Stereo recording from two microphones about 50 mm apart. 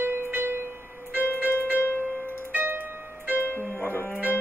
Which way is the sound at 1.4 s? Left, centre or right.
Left.